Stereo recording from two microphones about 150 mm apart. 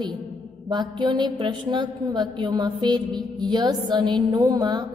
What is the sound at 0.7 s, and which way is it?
A woman's voice, 30° right (ahead or behind).